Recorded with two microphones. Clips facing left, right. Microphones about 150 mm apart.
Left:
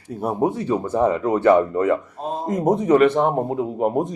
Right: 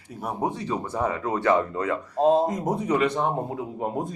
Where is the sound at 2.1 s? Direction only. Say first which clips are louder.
Right 9 dB; 90° right.